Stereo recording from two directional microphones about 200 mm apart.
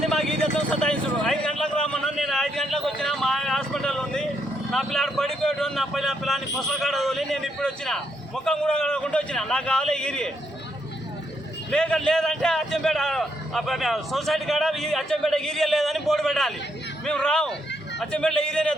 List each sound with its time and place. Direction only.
0.0 s vehicle: centre (ahead or behind)
4.7 s speech: centre (ahead or behind)
11.7 s speech: 5° left (ahead or behind)